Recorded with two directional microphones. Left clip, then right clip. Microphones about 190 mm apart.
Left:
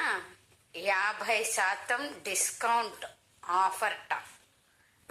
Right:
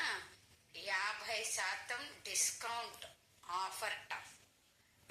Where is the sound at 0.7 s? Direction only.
55° left (ahead or behind).